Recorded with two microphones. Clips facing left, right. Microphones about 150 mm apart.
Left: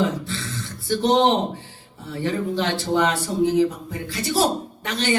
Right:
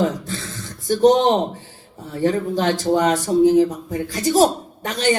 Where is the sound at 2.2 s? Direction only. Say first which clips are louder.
Right 5 dB; 45° right (ahead or behind).